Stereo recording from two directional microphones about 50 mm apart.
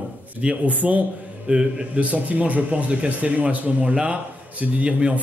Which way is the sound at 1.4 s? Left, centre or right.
Right.